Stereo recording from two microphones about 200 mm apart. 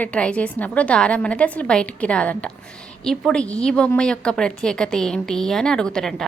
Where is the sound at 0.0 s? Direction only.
5° left (ahead or behind).